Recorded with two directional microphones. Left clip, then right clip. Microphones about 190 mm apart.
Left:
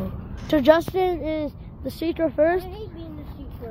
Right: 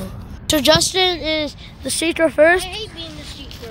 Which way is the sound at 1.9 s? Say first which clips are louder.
Right 7 dB; 25° right (ahead or behind).